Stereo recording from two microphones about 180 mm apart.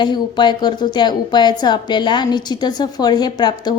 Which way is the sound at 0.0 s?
25° left (ahead or behind).